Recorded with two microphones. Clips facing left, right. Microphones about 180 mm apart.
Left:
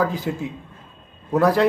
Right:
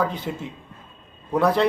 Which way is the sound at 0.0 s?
5° left (ahead or behind).